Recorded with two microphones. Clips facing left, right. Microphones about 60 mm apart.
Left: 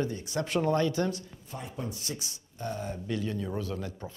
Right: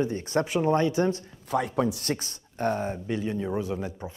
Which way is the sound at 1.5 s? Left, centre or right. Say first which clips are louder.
Right 13 dB; right.